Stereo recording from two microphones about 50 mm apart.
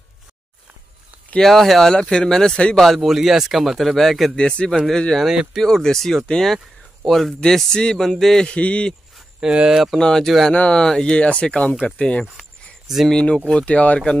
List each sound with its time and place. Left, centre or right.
1.4 s speech: centre
3.1 s speech: centre
4.4 s speech: centre
4.6 s speech: centre
5.2 s speech: centre
5.6 s speech: centre
8.5 s speech: left
9.4 s speech: centre
9.9 s speech: centre
10.5 s speech: left
10.8 s speech: centre